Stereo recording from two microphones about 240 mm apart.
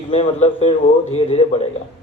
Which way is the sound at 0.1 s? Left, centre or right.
Left.